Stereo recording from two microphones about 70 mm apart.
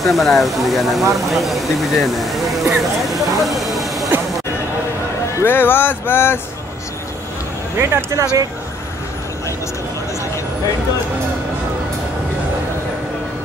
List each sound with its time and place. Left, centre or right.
0.0 s speech: centre
3.3 s a sound: centre
5.4 s speech: left
7.8 s speech: right